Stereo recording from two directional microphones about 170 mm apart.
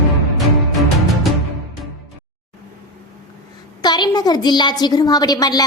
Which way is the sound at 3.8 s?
25° left (ahead or behind).